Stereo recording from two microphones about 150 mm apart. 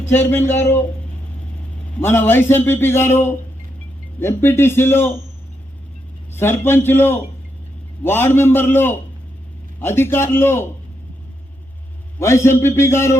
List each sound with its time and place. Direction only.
0.1 s a man's voice: 15° left (ahead or behind)
2.0 s a man's voice: 15° left (ahead or behind)
6.3 s a man's voice: 15° left (ahead or behind)
12.2 s a man's voice: 15° left (ahead or behind)